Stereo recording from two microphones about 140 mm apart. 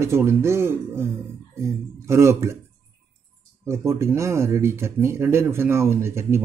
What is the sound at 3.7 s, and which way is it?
A man's voice, 20° right (ahead or behind).